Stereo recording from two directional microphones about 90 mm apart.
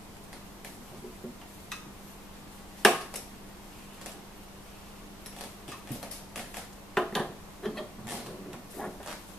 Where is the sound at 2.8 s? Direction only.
5° left (ahead or behind).